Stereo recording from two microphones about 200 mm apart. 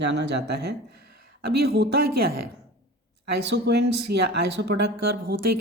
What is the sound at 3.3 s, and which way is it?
Music, 60° right (ahead or behind).